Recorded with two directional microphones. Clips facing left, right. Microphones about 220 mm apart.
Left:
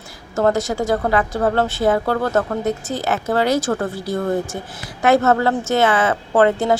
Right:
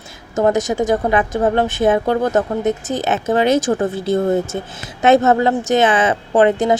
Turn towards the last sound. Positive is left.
turn(degrees=-20)  # may be behind; listen again after turning